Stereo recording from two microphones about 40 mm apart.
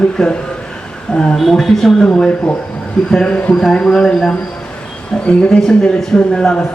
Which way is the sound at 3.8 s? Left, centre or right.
Centre.